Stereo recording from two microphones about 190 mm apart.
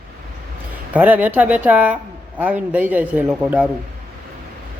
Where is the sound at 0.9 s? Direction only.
10° right (ahead or behind).